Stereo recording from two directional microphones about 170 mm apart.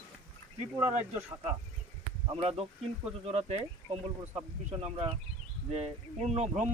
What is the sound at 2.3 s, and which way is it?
Speech, 35° right (ahead or behind).